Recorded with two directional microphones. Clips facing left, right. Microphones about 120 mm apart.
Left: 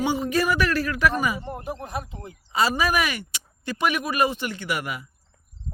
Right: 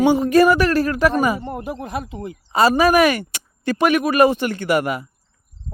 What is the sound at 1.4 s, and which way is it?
Speech, 80° right.